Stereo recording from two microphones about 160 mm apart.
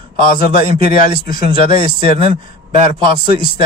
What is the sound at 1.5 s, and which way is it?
A man's voice, 35° right (ahead or behind).